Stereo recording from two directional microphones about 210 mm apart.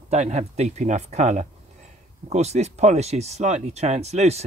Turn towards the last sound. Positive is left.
turn(degrees=-30)  # may be behind; listen again after turning